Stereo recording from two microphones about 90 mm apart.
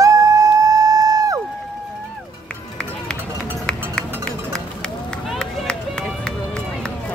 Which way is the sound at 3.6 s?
10° left (ahead or behind).